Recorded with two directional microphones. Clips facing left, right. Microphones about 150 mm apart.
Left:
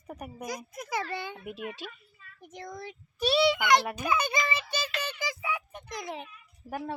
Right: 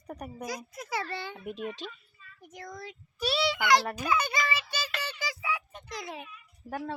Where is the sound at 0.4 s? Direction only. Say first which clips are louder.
Left 1 dB; 20° left (ahead or behind).